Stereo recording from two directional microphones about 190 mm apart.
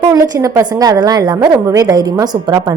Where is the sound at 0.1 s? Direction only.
15° right (ahead or behind).